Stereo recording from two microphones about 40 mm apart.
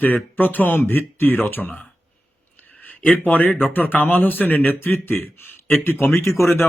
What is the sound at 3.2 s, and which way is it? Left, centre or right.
Speech, left.